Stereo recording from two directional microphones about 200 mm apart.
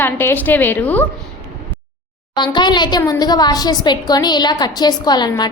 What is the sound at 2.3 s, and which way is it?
A woman's voice, 20° left (ahead or behind).